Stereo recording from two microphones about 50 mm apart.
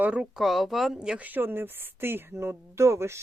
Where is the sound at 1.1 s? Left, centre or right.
Right.